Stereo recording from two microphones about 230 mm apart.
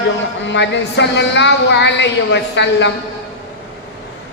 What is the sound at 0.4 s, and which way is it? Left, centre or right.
A woman's voice, left.